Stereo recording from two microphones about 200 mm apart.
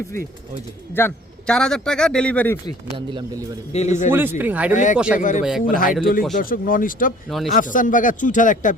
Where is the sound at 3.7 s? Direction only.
35° left (ahead or behind).